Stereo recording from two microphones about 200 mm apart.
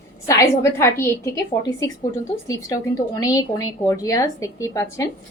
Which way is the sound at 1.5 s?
25° left (ahead or behind).